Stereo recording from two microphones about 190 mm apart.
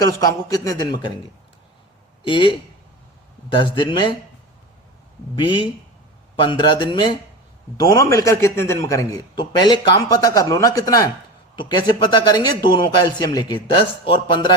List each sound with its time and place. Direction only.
0.0 s a man's voice: 20° left (ahead or behind)
2.2 s a man's voice: 25° left (ahead or behind)
6.4 s a man's voice: 25° left (ahead or behind)